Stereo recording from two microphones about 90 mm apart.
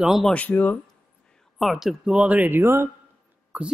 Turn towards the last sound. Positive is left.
turn(degrees=-15)  # may be behind; listen again after turning